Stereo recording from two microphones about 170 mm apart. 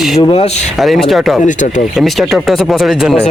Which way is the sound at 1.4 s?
45° left (ahead or behind).